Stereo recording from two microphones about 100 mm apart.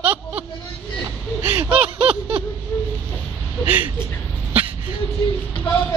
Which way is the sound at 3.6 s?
15° right (ahead or behind).